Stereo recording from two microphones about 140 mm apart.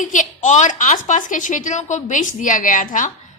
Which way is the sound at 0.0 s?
65° left (ahead or behind).